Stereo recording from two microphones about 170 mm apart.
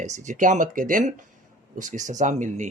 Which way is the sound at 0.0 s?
45° right (ahead or behind).